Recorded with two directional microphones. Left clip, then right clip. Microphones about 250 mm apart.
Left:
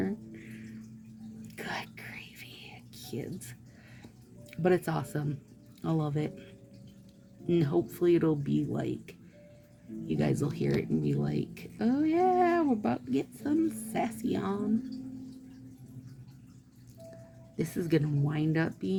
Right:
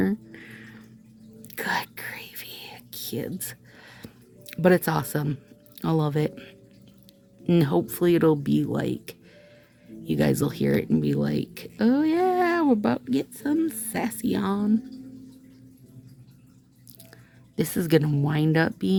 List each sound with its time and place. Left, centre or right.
0.0 s a sound: right
1.5 s whispering: right
5.8 s speech: right
17.6 s speech: right